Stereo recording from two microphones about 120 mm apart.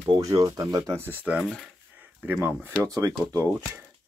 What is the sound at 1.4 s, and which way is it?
Speech, centre (ahead or behind).